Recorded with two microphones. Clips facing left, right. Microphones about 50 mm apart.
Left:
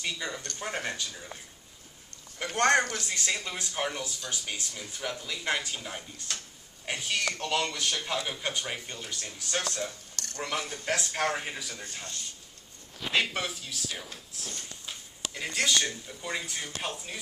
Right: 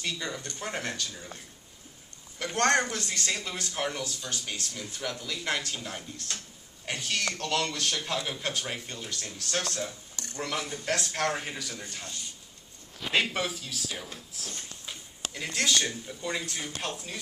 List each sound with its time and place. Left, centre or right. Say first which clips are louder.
0.0 s speech: even; centre
10.1 s a sound: even; centre
10.4 s speech: even; centre
15.3 s speech: even; centre